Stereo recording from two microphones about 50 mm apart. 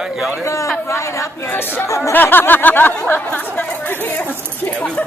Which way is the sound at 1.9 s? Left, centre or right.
Left.